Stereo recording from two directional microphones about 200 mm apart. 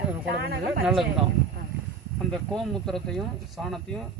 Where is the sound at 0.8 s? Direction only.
Centre (ahead or behind).